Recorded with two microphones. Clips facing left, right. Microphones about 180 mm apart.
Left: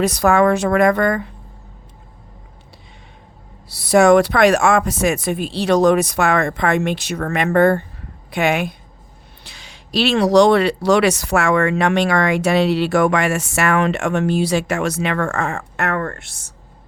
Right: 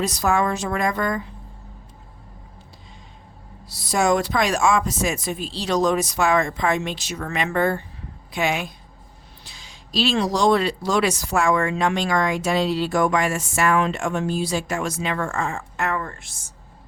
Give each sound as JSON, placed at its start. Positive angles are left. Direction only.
{"t": 0.0, "sound": "speech", "side_deg": 60}
{"t": 3.7, "sound": "speech", "side_deg": 65}